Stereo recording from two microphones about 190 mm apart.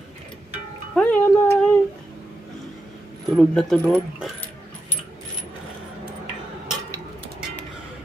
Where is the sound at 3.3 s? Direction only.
Centre (ahead or behind).